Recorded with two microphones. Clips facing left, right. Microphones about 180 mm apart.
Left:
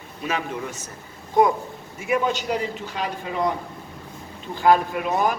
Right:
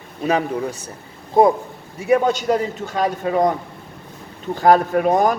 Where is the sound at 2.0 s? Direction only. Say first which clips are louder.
Right 6 dB; 40° right (ahead or behind).